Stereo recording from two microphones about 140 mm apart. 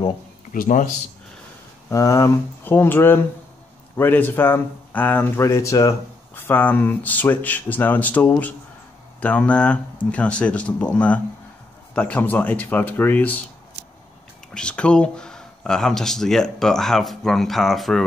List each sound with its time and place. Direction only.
0.5 s a man's voice: 70° left (ahead or behind)
1.9 s speech: 25° left (ahead or behind)
14.5 s speech: 5° left (ahead or behind)